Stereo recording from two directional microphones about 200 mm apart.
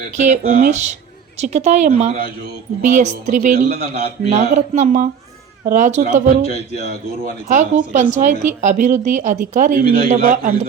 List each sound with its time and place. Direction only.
0.2 s a man's voice: 40° right (ahead or behind)
7.4 s speech: 35° right (ahead or behind)